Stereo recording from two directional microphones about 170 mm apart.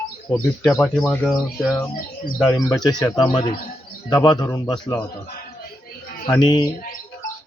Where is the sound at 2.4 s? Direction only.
20° left (ahead or behind).